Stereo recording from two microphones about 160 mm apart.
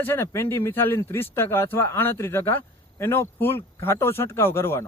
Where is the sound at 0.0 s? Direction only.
15° left (ahead or behind).